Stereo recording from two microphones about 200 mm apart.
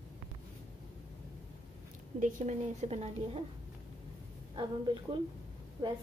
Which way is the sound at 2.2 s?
35° right (ahead or behind).